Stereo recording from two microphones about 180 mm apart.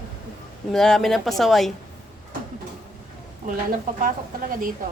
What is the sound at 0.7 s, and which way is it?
Speech, centre (ahead or behind).